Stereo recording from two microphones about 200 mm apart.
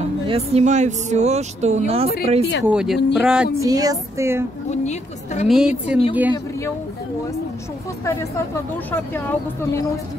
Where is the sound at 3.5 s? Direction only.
15° right (ahead or behind).